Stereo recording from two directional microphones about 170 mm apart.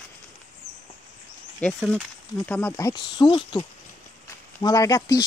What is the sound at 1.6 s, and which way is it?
Speech, 5° left (ahead or behind).